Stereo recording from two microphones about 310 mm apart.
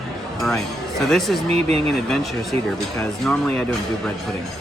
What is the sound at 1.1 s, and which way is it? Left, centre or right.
Speech, centre.